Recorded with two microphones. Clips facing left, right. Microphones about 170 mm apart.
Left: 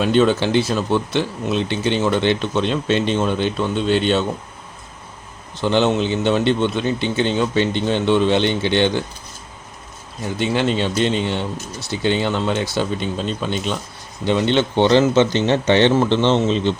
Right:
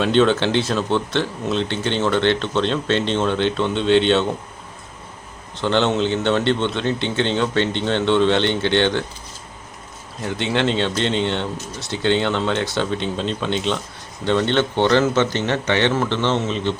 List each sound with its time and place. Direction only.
0.0 s speech: 5° left (ahead or behind)
5.5 s speech: 10° left (ahead or behind)
10.2 s speech: 5° left (ahead or behind); by 16.7 s 25° left (ahead or behind)